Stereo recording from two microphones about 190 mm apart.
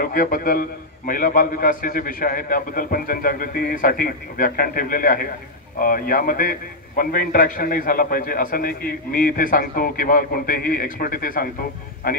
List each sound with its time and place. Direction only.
0.0 s a man's voice: 50° left (ahead or behind)